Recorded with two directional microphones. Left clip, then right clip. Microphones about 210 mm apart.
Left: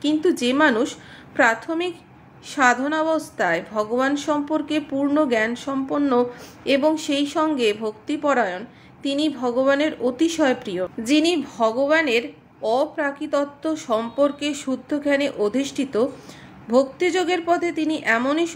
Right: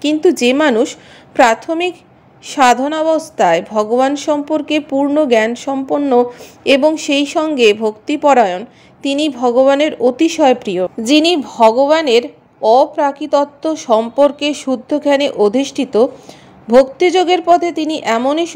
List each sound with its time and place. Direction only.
0.0 s a woman's voice: 30° right (ahead or behind)